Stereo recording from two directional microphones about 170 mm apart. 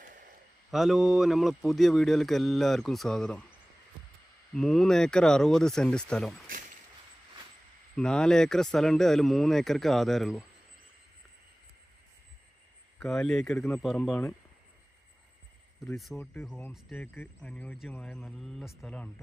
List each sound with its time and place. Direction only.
0.0 s a sound: 50° right (ahead or behind)
0.7 s speech: centre (ahead or behind)
4.5 s speech: 5° left (ahead or behind)
7.9 s speech: 5° left (ahead or behind)
13.0 s speech: 5° left (ahead or behind)
15.8 s speech: centre (ahead or behind)
16.1 s speech: 10° left (ahead or behind)